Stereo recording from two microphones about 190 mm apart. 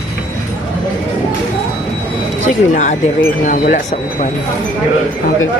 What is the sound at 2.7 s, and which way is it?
Speech, 40° left (ahead or behind).